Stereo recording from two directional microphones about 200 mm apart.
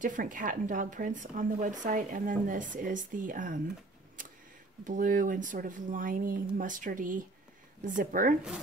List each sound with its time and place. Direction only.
0.0 s speech: 40° right (ahead or behind)
4.8 s speech: 40° right (ahead or behind)